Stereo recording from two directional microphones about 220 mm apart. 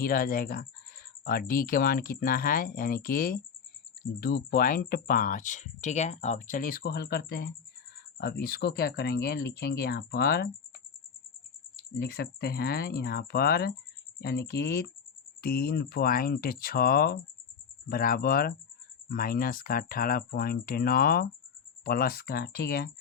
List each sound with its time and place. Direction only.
0.0 s speech: 40° left (ahead or behind)
11.8 s speech: 45° left (ahead or behind)